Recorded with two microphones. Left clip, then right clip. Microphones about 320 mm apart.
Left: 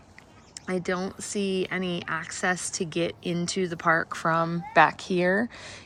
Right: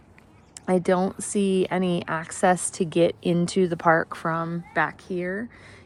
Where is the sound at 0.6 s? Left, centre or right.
Centre.